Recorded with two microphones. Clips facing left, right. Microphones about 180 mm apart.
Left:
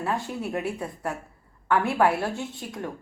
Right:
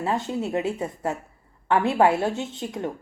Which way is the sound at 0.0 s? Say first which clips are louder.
Right 3 dB; 20° right (ahead or behind).